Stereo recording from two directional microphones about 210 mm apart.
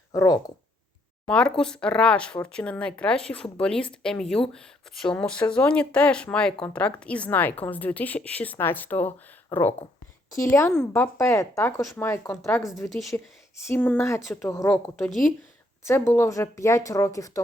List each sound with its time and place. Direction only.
0.1 s speech: 15° left (ahead or behind)
1.3 s speech: 5° left (ahead or behind)
12.9 s speech: centre (ahead or behind)
13.7 s speech: 10° left (ahead or behind)
15.8 s speech: 10° left (ahead or behind)